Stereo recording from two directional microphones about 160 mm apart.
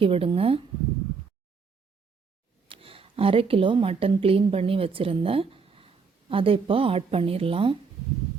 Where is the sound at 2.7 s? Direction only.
35° right (ahead or behind).